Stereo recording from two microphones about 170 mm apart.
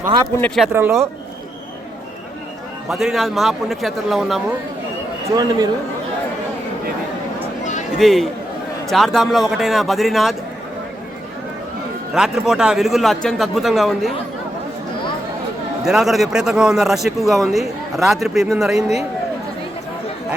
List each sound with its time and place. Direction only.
0.3 s speech: 10° left (ahead or behind)
0.6 s speech: 15° right (ahead or behind)
2.9 s speech: centre (ahead or behind)
5.3 s speech: 20° right (ahead or behind)
7.6 s a sound: 45° left (ahead or behind)
7.9 s speech: centre (ahead or behind)
12.1 s speech: 5° right (ahead or behind)
15.8 s speech: centre (ahead or behind)